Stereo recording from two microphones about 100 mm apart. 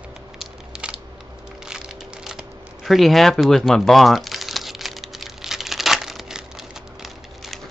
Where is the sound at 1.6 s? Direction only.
5° right (ahead or behind).